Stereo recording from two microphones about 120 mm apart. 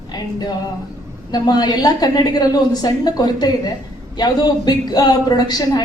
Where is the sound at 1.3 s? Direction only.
35° left (ahead or behind).